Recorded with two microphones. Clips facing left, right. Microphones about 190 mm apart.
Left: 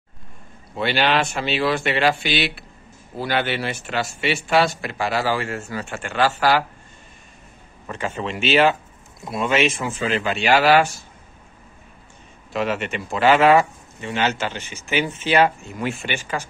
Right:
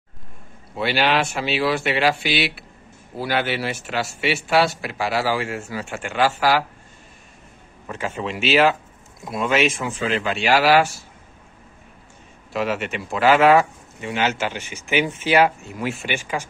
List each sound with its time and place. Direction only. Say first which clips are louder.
0.7 s speech: even; 5° right (ahead or behind)
7.8 s speech: even; 5° right (ahead or behind)
12.5 s speech: even; 5° right (ahead or behind)